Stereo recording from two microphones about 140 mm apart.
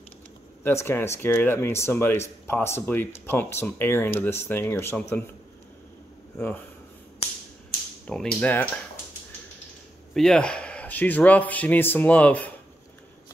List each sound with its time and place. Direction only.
0.7 s speech: 15° left (ahead or behind)
6.3 s speech: 15° left (ahead or behind)
8.1 s speech: 5° left (ahead or behind)
10.1 s speech: 5° left (ahead or behind)